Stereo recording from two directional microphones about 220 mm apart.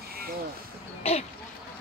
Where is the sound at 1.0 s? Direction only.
30° left (ahead or behind).